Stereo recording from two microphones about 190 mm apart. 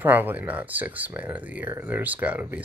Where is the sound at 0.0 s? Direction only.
10° right (ahead or behind).